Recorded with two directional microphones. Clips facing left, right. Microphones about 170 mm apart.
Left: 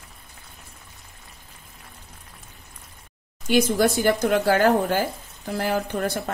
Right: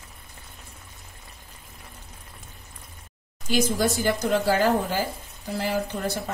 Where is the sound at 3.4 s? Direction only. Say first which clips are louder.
Left 4 dB; 60° left (ahead or behind).